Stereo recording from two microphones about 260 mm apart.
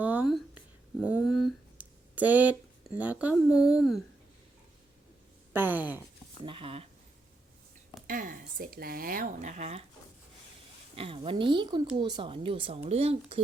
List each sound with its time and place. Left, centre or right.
0.0 s a sound: centre
1.0 s a woman's voice: centre
1.8 s a sound: centre
3.0 s a woman's voice: centre
5.5 s speech: centre
6.4 s speech: right
8.0 s speech: right
10.9 s speech: right